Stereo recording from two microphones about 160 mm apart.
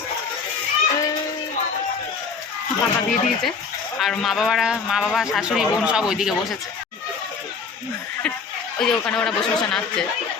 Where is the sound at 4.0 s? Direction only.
Centre (ahead or behind).